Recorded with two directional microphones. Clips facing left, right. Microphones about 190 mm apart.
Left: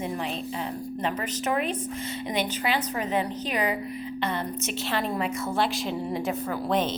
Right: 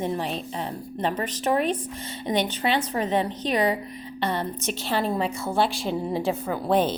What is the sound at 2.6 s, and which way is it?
A woman's voice, 30° right (ahead or behind).